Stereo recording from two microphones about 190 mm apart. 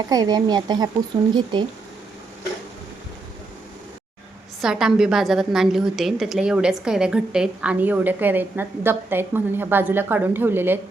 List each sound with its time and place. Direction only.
0.1 s speech: 20° right (ahead or behind)
4.6 s a woman's voice: 5° right (ahead or behind)